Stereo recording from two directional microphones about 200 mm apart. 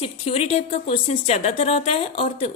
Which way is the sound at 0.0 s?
30° left (ahead or behind).